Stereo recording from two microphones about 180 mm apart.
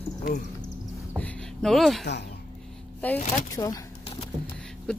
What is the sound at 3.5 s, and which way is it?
Speech, 20° left (ahead or behind).